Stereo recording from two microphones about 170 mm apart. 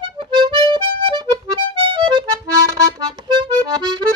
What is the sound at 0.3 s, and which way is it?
Accordion, 30° right (ahead or behind).